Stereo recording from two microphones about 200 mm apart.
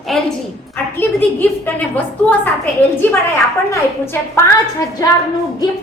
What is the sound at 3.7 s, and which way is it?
A woman's voice, 10° left (ahead or behind).